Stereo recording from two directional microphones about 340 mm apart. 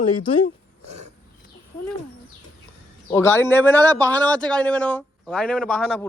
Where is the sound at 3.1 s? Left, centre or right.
Centre.